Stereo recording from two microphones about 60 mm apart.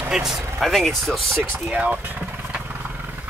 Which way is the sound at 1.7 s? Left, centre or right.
Right.